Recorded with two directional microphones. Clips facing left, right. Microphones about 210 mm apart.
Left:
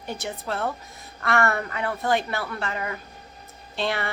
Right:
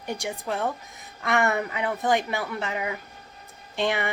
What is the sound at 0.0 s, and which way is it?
A woman's voice, 15° right (ahead or behind).